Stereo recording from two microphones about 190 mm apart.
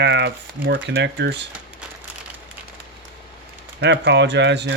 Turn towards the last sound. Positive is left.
turn(degrees=-65)  # may be behind; listen again after turning